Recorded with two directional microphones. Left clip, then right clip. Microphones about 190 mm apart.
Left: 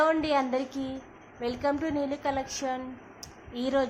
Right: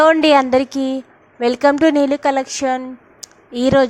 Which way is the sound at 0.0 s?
45° right (ahead or behind).